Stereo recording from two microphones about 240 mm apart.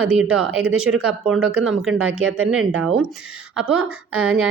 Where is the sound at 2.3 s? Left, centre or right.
Right.